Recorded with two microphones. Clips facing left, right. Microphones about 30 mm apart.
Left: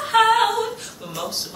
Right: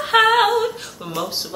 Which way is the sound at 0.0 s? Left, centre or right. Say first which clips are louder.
Right 2 dB; centre.